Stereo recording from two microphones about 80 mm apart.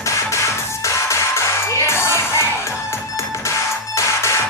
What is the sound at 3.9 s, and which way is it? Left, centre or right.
Music, left.